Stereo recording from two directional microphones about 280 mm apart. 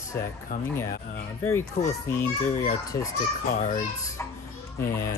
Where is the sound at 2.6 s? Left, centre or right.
Centre.